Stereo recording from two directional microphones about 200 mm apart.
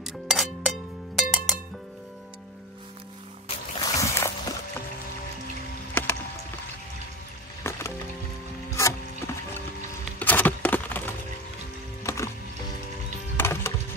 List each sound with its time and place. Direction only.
0.0 s music: centre (ahead or behind)
3.4 s music: 20° left (ahead or behind)
6.0 s music: 10° left (ahead or behind)
7.7 s music: 15° left (ahead or behind)
8.7 s a sound: 15° left (ahead or behind)
10.1 s music: 10° left (ahead or behind)
13.4 s music: 10° left (ahead or behind)